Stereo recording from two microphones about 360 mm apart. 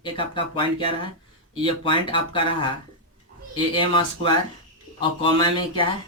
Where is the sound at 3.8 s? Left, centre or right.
Centre.